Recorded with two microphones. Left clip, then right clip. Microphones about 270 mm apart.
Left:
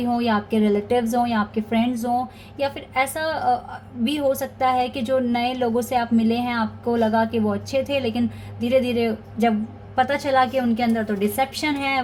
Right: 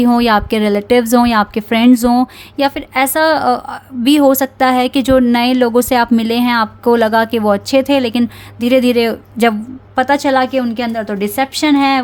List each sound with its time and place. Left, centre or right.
0.0 s a woman's voice: right